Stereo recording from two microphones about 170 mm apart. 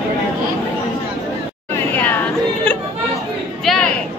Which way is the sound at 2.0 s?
10° left (ahead or behind).